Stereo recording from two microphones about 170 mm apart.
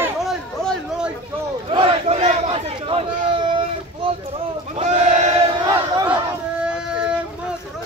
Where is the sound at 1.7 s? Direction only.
30° right (ahead or behind).